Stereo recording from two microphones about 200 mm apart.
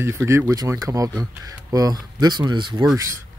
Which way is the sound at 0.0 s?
15° right (ahead or behind).